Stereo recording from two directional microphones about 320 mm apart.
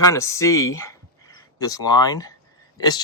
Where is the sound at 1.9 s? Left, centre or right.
Centre.